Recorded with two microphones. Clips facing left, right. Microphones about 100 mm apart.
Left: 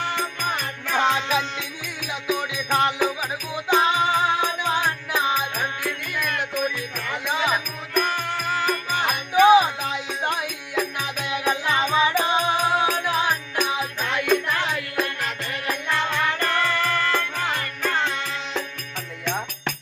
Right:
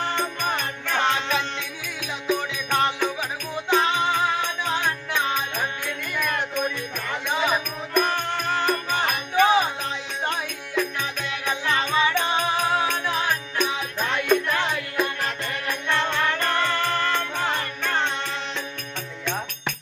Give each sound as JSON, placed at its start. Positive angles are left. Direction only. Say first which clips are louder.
{"t": 0.0, "sound": "music", "louder": "right 1 dB", "side_deg": 5}
{"t": 12.9, "sound": "music", "louder": "left 2 dB", "side_deg": 5}
{"t": 16.6, "sound": "music", "louder": "left 1 dB", "side_deg": -30}
{"t": 17.3, "sound": "music", "louder": "right 1 dB", "side_deg": 0}
{"t": 19.2, "sound": "music", "louder": "left 2 dB", "side_deg": 5}